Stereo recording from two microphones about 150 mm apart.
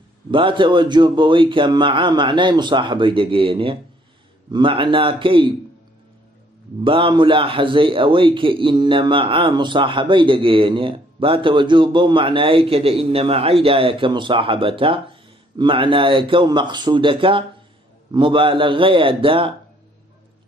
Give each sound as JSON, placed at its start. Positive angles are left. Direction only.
{"t": 0.3, "sound": "a man's voice", "side_deg": -35}
{"t": 6.8, "sound": "a man's voice", "side_deg": -35}